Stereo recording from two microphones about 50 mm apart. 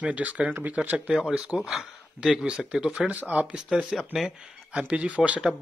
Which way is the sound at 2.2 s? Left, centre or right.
Centre.